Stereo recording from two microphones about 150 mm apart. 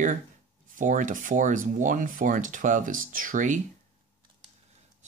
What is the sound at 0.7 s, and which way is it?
Speech, 60° right (ahead or behind).